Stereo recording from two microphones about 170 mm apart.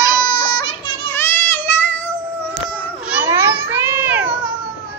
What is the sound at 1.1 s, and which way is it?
Child singing, 15° left (ahead or behind).